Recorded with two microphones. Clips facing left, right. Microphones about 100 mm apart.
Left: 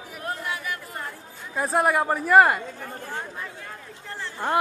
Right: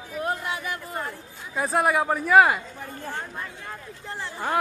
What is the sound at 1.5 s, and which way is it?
Speech, centre (ahead or behind).